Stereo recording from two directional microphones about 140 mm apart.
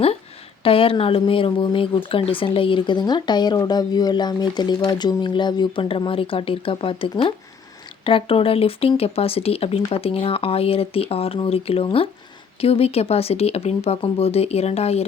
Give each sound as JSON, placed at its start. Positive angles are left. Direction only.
{"t": 0.6, "sound": "speech", "side_deg": 40}